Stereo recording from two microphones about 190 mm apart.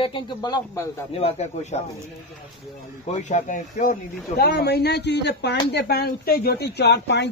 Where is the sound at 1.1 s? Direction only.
35° left (ahead or behind).